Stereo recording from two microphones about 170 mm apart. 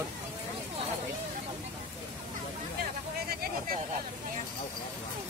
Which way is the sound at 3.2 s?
55° right (ahead or behind).